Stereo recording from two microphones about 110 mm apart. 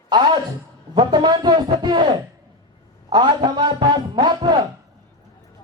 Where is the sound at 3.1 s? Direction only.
40° right (ahead or behind).